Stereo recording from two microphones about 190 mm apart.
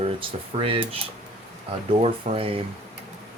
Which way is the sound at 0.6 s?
30° right (ahead or behind).